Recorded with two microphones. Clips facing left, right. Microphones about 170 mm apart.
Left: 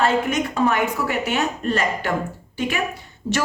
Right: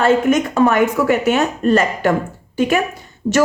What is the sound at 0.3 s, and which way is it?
Speech, 50° right (ahead or behind).